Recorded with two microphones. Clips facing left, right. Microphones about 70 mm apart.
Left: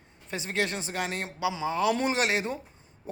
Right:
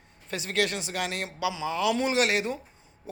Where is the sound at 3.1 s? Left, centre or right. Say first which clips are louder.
Left 2 dB; left.